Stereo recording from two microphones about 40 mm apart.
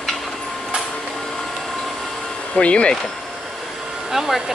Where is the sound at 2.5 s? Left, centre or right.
Left.